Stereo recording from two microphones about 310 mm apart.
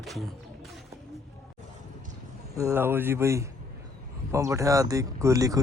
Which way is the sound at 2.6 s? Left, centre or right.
Centre.